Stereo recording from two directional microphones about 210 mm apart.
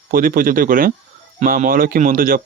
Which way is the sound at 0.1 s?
40° right (ahead or behind).